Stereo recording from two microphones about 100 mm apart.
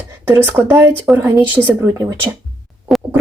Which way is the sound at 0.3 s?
20° right (ahead or behind).